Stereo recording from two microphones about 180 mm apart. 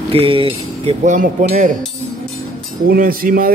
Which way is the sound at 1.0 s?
45° right (ahead or behind).